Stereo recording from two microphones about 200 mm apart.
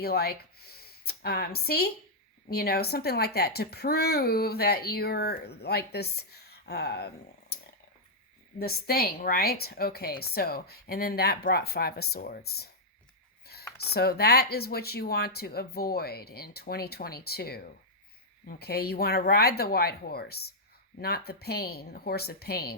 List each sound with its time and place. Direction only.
0.0 s speech: 50° left (ahead or behind)
8.5 s speech: 50° left (ahead or behind)
13.9 s speech: 50° left (ahead or behind)